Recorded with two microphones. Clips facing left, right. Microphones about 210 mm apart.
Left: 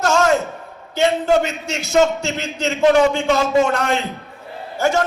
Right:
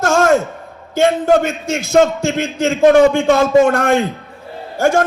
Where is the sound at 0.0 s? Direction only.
50° right (ahead or behind).